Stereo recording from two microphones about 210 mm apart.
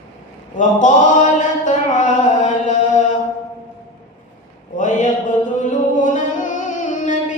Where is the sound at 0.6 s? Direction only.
35° left (ahead or behind).